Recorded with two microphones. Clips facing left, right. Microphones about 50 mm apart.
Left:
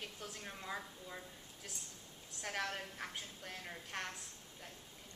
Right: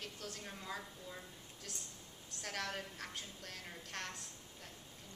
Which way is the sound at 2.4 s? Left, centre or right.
Centre.